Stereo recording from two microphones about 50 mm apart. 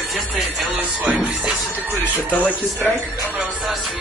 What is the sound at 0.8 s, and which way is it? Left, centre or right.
Speech, right.